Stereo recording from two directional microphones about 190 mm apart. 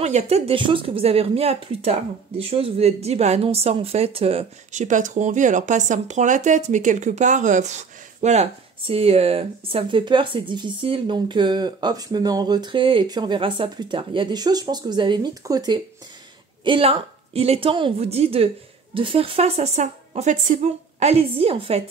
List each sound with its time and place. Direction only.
0.0 s speech: 35° right (ahead or behind)